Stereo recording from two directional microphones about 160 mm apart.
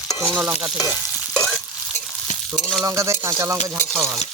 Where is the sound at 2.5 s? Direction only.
5° right (ahead or behind).